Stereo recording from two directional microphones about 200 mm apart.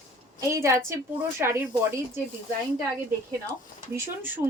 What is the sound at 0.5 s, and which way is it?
Speech, 15° right (ahead or behind).